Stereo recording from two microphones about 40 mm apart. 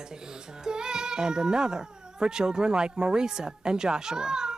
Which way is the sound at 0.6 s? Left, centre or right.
Centre.